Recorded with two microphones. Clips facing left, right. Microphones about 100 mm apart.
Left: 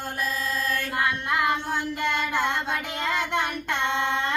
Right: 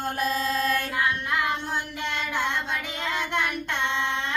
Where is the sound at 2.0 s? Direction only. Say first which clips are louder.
Left 4 dB; 55° left (ahead or behind).